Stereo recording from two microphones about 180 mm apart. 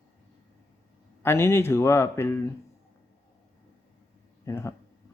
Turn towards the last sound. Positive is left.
turn(degrees=15)  # may be behind; listen again after turning